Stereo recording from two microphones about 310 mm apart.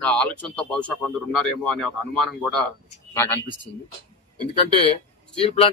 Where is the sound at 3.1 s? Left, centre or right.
Centre.